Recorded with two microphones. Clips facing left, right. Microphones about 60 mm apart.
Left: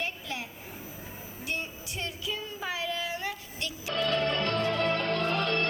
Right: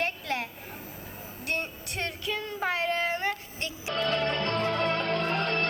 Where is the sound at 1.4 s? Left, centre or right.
Right.